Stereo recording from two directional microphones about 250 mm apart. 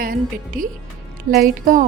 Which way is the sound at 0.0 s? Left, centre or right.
Right.